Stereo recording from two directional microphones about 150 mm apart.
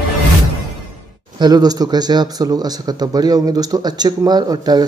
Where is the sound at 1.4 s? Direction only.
25° right (ahead or behind).